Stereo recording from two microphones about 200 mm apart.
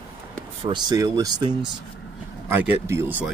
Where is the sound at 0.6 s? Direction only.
20° right (ahead or behind).